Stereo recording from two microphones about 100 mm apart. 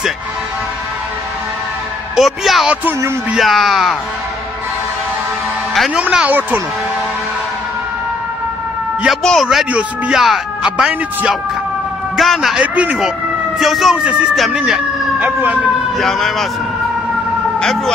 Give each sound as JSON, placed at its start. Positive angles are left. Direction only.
{"t": 2.1, "sound": "speech", "side_deg": 0}
{"t": 5.9, "sound": "speech", "side_deg": -10}
{"t": 9.0, "sound": "speech", "side_deg": 0}
{"t": 12.2, "sound": "speech", "side_deg": 0}
{"t": 15.1, "sound": "speech", "side_deg": -15}
{"t": 16.0, "sound": "speech", "side_deg": 0}
{"t": 17.6, "sound": "speech", "side_deg": 5}